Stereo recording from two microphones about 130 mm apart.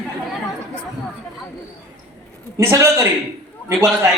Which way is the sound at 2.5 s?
25° right (ahead or behind).